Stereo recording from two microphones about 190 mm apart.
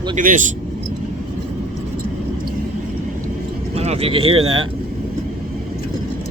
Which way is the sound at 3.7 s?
30° right (ahead or behind).